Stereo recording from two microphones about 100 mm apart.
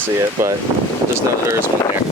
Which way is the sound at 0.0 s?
30° right (ahead or behind).